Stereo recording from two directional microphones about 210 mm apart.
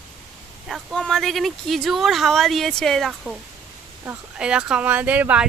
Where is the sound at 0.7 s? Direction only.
Centre (ahead or behind).